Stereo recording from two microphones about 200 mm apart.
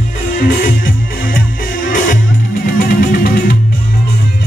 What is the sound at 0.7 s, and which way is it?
Music, 45° left (ahead or behind).